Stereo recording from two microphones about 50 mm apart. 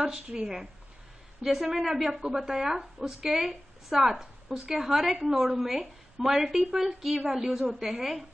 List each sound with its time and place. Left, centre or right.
0.0 s speech: right
1.4 s speech: centre